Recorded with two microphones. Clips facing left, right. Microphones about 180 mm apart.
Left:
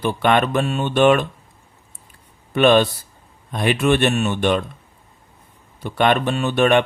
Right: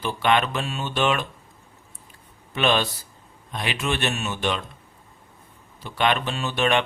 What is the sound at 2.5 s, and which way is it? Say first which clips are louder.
Speech: left 8 dB; 50° left (ahead or behind).